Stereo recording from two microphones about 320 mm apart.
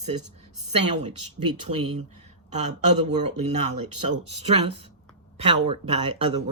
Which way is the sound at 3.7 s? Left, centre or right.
Right.